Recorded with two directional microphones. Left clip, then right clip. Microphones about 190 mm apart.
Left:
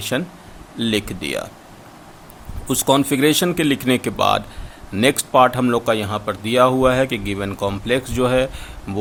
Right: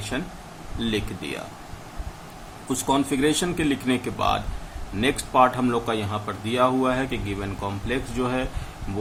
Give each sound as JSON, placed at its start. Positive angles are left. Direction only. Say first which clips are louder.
{"t": 0.1, "sound": "a man's voice", "louder": "left 7 dB", "side_deg": 55}
{"t": 2.6, "sound": "a man's voice", "louder": "left 6 dB", "side_deg": 55}